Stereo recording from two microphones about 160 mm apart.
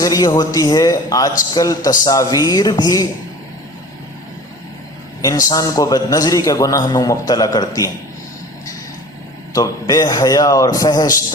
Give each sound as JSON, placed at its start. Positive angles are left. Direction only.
{"t": 0.0, "sound": "a man's voice", "side_deg": 25}
{"t": 5.2, "sound": "a man's voice", "side_deg": 20}
{"t": 9.5, "sound": "a man's voice", "side_deg": 25}